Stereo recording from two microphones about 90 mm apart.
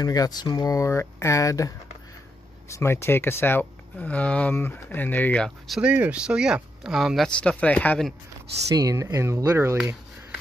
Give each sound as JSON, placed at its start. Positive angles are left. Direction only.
{"t": 0.0, "sound": "speech", "side_deg": 45}
{"t": 2.7, "sound": "speech", "side_deg": 30}
{"t": 5.8, "sound": "speech", "side_deg": -15}
{"t": 7.2, "sound": "speech", "side_deg": 10}
{"t": 8.7, "sound": "speech", "side_deg": -40}